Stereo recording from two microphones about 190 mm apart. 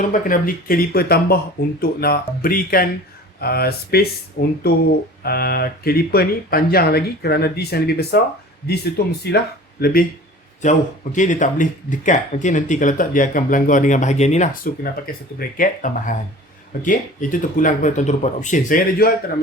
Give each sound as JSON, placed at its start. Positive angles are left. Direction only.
{"t": 0.1, "sound": "speech", "side_deg": 45}
{"t": 10.6, "sound": "speech", "side_deg": 40}